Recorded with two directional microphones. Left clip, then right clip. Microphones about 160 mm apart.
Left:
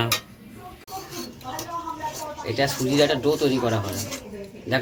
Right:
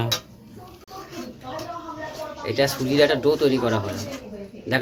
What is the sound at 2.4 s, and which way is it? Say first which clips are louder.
Speech: right 2 dB; 10° right (ahead or behind).